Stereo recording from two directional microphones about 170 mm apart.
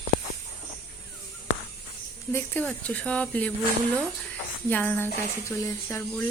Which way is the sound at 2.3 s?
10° left (ahead or behind).